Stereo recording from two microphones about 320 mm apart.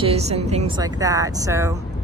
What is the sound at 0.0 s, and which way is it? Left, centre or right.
Speech, centre.